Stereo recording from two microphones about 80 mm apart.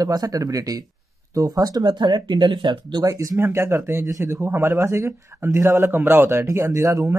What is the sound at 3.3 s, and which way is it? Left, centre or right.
Speech, right.